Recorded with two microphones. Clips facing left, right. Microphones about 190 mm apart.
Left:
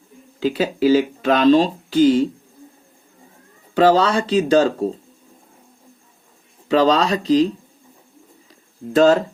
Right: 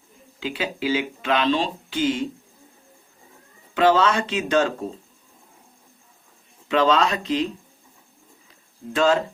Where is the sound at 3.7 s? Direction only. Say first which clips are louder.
Left 4 dB; 35° left (ahead or behind).